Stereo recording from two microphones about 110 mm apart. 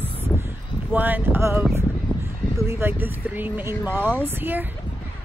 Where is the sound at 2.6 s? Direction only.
20° right (ahead or behind).